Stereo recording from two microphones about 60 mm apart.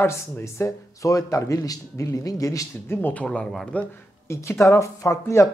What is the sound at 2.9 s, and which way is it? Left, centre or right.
Speech, left.